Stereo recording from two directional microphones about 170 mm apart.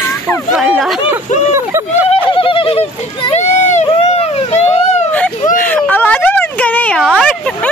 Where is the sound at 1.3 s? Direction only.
50° left (ahead or behind).